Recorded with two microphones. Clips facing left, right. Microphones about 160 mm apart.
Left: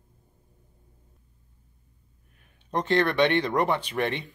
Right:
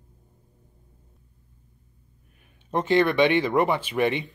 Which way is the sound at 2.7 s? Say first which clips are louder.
Right 3 dB; 5° right (ahead or behind).